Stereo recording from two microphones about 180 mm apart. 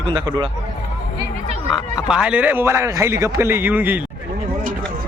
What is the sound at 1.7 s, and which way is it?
Speech, 5° right (ahead or behind).